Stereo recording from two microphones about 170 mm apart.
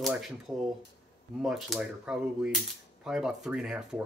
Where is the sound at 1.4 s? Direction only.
Centre (ahead or behind).